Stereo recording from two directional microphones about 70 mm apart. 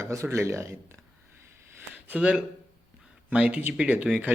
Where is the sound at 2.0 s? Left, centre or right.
Centre.